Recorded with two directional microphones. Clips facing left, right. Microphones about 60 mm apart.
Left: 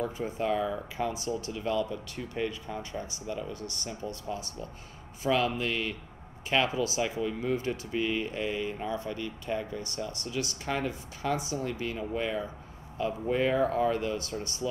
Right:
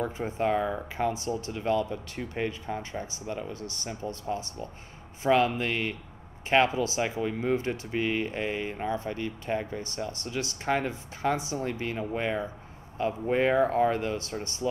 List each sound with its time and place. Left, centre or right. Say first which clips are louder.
0.0 s speech: right 3 dB; right
4.0 s speech: right 4 dB; right